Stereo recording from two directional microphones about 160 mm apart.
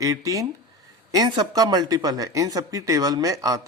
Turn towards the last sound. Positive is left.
turn(degrees=-20)  # may be behind; listen again after turning